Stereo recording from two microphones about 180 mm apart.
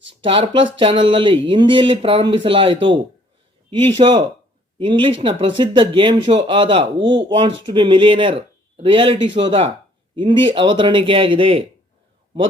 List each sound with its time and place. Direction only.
0.2 s speech: 30° right (ahead or behind)